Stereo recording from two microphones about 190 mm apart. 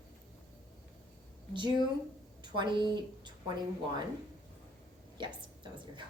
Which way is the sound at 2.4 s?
25° right (ahead or behind).